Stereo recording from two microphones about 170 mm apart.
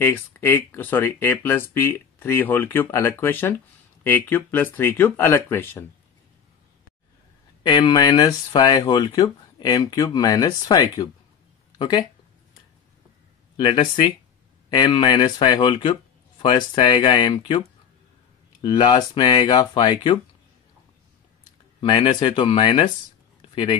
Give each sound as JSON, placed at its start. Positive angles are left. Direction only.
{"t": 0.0, "sound": "speech", "side_deg": 15}
{"t": 7.6, "sound": "speech", "side_deg": 25}
{"t": 13.6, "sound": "speech", "side_deg": 30}
{"t": 18.6, "sound": "speech", "side_deg": 25}
{"t": 21.8, "sound": "speech", "side_deg": 25}